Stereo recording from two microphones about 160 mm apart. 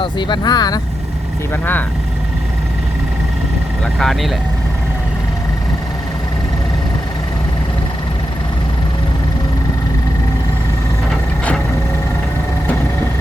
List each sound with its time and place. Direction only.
0.0 s speech: 30° left (ahead or behind)
3.9 s speech: centre (ahead or behind)